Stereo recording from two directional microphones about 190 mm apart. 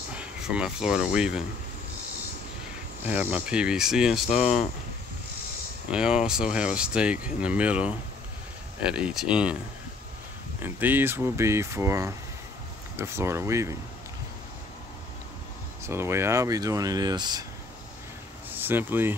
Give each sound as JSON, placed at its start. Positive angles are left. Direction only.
{"t": 0.1, "sound": "speech", "side_deg": -5}
{"t": 3.1, "sound": "speech", "side_deg": -10}
{"t": 5.9, "sound": "speech", "side_deg": -5}
{"t": 10.6, "sound": "speech", "side_deg": -10}
{"t": 15.8, "sound": "speech", "side_deg": -15}
{"t": 18.5, "sound": "speech", "side_deg": -10}